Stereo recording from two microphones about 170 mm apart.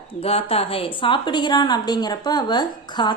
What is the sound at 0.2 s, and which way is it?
A woman's voice, 35° left (ahead or behind).